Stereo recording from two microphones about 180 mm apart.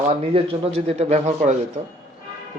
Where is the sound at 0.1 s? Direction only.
30° right (ahead or behind).